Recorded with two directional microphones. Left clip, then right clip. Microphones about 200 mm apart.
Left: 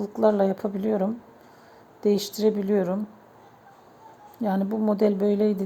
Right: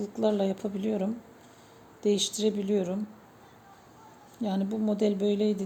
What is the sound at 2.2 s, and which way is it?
Speech, 5° left (ahead or behind).